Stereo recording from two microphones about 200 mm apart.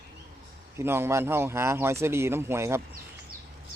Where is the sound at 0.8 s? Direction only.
10° right (ahead or behind).